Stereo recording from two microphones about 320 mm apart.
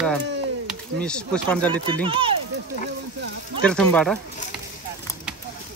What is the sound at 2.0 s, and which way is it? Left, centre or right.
Speech, centre.